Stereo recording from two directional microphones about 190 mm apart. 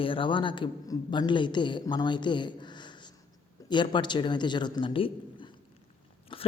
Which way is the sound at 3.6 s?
25° left (ahead or behind).